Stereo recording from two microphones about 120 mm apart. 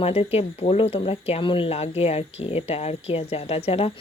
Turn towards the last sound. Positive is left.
turn(degrees=55)  # may be behind; listen again after turning